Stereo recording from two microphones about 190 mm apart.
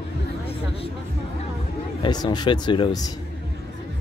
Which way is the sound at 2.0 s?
20° left (ahead or behind).